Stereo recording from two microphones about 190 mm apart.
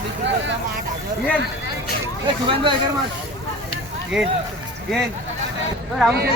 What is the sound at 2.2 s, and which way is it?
Speech, 25° right (ahead or behind).